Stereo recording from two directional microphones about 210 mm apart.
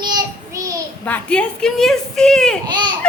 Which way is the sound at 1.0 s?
5° left (ahead or behind).